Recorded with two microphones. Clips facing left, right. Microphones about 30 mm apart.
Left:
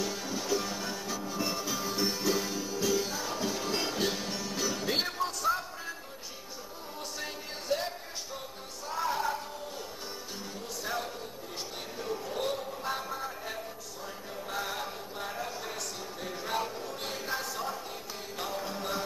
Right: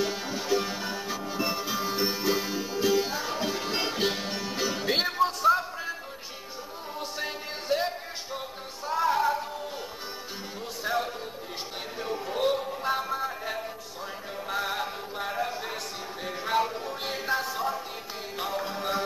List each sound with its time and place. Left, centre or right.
0.0 s music: right
7.2 s music: right
10.8 s a sound: right
12.0 s music: right